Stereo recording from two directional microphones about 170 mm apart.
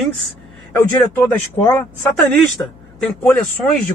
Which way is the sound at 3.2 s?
10° left (ahead or behind).